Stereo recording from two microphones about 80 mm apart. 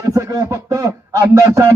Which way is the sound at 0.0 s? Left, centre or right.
Right.